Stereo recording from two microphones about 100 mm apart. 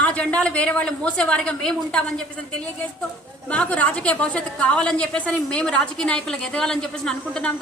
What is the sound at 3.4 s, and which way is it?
A woman's voice, 10° left (ahead or behind).